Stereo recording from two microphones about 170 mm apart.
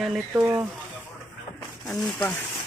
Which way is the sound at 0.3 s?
15° right (ahead or behind).